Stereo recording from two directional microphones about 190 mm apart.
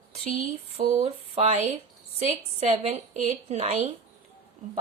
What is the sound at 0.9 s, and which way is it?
A woman's voice, 35° right (ahead or behind).